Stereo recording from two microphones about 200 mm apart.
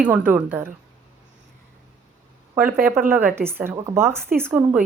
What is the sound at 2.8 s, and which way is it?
Speech, 10° right (ahead or behind).